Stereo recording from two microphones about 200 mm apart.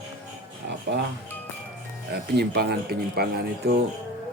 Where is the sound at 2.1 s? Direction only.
55° right (ahead or behind).